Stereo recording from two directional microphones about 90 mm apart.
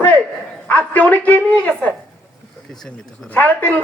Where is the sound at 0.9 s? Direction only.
15° left (ahead or behind).